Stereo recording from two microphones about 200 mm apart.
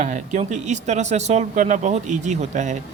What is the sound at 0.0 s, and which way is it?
Speech, 40° right (ahead or behind).